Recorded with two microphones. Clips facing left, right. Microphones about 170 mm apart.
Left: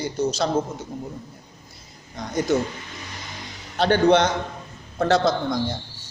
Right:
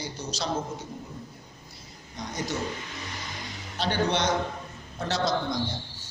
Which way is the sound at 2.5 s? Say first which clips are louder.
Left 12 dB; 55° left (ahead or behind).